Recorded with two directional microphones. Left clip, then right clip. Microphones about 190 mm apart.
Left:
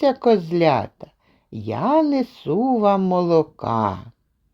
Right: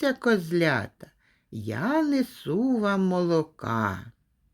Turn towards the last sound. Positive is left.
turn(degrees=10)  # may be behind; listen again after turning